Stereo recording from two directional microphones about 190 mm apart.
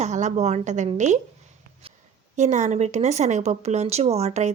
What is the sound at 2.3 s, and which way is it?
Speech, 40° right (ahead or behind).